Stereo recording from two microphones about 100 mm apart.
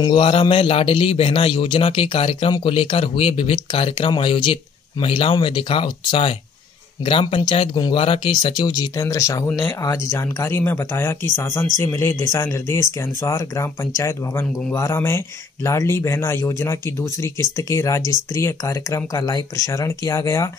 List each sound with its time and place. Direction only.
0.0 s a man's voice: 60° left (ahead or behind)
8.3 s speech: 50° left (ahead or behind); by 20.4 s 30° left (ahead or behind)